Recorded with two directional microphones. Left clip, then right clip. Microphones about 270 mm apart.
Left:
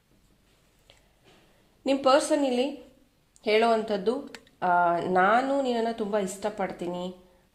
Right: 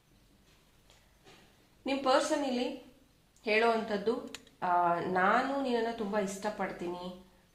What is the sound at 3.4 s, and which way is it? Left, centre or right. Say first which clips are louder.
Speech: left 5 dB; left.